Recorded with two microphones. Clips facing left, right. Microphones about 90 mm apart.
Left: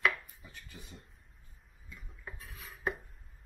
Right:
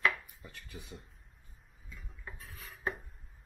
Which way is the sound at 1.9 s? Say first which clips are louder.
Left 1 dB; 5° left (ahead or behind).